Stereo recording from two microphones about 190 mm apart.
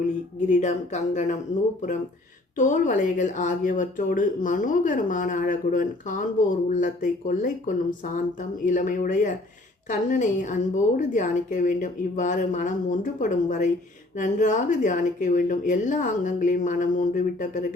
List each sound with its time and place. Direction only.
0.4 s a woman's voice: 40° left (ahead or behind)
2.6 s a woman's voice: 40° left (ahead or behind)